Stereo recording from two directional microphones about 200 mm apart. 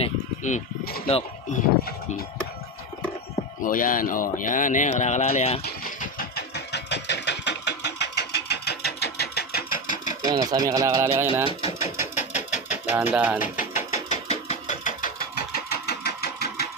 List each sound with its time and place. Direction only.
0.0 s sheep: 35° left (ahead or behind)
3.6 s speech: 45° left (ahead or behind)
5.6 s engine: 45° left (ahead or behind)
10.2 s speech: 20° right (ahead or behind)
11.6 s a sound: 35° left (ahead or behind)
12.9 s speech: 10° right (ahead or behind)
13.4 s sewing machine: 40° left (ahead or behind)